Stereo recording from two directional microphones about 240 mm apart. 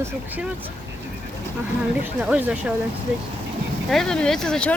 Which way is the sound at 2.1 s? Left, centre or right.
Centre.